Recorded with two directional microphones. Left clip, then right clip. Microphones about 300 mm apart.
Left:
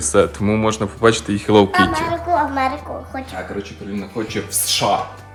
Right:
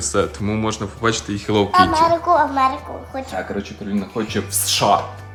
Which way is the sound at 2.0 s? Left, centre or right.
Centre.